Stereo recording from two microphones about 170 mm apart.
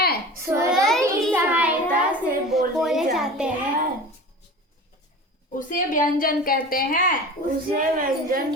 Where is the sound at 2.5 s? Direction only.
Centre (ahead or behind).